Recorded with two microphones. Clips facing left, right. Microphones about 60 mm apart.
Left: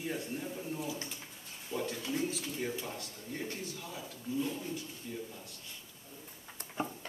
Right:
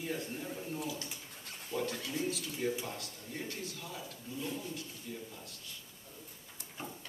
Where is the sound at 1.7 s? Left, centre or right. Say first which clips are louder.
Right 1 dB; centre.